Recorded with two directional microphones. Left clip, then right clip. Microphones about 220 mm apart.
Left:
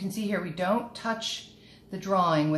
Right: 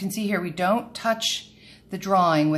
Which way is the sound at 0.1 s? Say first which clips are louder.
Right 4 dB; 15° right (ahead or behind).